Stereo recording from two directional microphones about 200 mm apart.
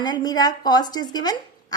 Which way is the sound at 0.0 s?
20° left (ahead or behind).